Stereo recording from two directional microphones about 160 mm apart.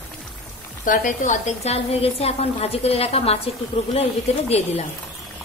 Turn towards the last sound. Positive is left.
turn(degrees=40)  # may be behind; listen again after turning